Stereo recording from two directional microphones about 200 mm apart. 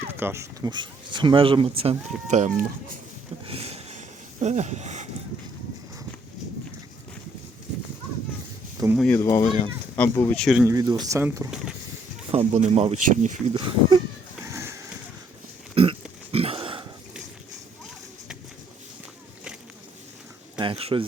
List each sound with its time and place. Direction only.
0.1 s speech: 10° right (ahead or behind); by 2.6 s 35° right (ahead or behind)
3.4 s a sound: 30° right (ahead or behind)
8.8 s speech: 20° right (ahead or behind)
9.1 s speech: 15° left (ahead or behind)
10.7 s speech: 20° right (ahead or behind)
12.3 s speech: 35° right (ahead or behind)
14.5 s horse: 15° right (ahead or behind)
15.7 s pig: 25° right (ahead or behind)
16.3 s a sound: 30° right (ahead or behind)
20.6 s a sound: 25° right (ahead or behind)